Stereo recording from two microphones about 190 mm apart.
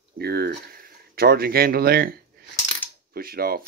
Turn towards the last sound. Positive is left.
turn(degrees=-50)  # may be behind; listen again after turning